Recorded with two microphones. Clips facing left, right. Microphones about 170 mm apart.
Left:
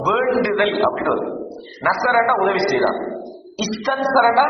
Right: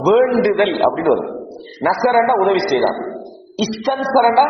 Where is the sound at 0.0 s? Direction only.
30° right (ahead or behind).